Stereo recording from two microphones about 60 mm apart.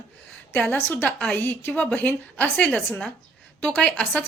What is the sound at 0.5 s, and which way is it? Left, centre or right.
Speech, left.